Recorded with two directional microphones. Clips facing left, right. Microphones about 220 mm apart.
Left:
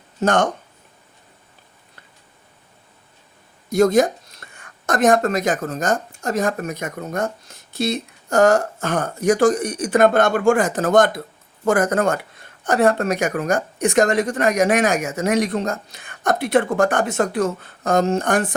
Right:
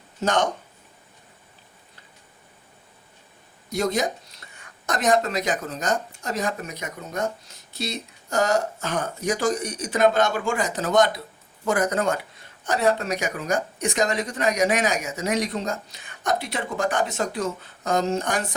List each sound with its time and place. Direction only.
0.2 s speech: 55° left (ahead or behind)
3.7 s speech: 50° left (ahead or behind)